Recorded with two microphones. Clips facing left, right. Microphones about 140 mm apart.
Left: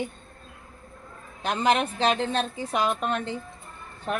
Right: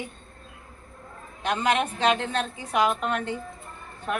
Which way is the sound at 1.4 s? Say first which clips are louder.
Left 1 dB; 30° left (ahead or behind).